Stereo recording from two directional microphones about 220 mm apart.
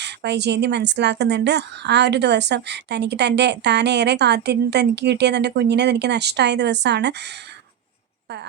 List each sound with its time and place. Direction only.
0.0 s speech: 50° right (ahead or behind)